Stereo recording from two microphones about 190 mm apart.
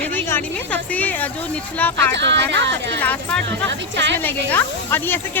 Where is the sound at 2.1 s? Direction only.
70° right (ahead or behind).